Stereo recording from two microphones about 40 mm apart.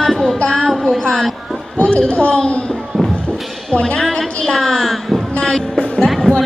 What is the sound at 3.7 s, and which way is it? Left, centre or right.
Speech, left.